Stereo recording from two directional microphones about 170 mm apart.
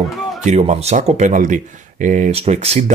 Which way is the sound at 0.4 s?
45° right (ahead or behind).